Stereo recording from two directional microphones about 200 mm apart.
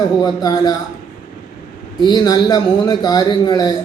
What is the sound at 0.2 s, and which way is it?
Speech, 20° left (ahead or behind).